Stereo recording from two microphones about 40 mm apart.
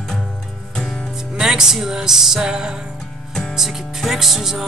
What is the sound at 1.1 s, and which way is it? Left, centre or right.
Music, centre.